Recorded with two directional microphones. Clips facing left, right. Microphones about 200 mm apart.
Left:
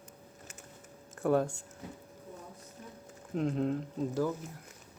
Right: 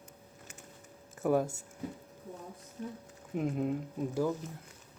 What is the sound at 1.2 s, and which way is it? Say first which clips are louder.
Speech: left 1 dB; 10° right (ahead or behind).